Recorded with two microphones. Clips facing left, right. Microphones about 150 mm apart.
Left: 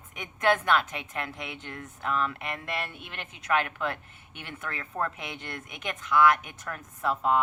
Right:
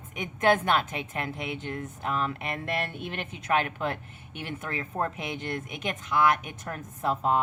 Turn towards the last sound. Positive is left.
turn(degrees=-30)  # may be behind; listen again after turning